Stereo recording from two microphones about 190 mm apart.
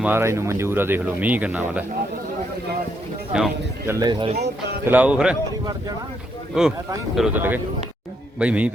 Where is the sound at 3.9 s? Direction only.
20° right (ahead or behind).